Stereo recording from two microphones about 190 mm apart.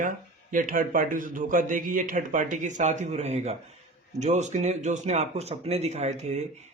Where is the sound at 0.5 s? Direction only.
45° right (ahead or behind).